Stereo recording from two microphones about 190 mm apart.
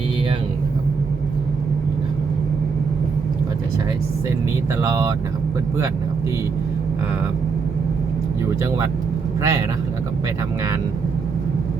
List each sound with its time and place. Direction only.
4.8 s speech: 15° right (ahead or behind)
9.4 s speech: 15° right (ahead or behind)